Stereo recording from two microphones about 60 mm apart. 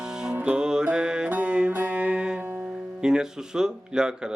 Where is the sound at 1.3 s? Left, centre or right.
Right.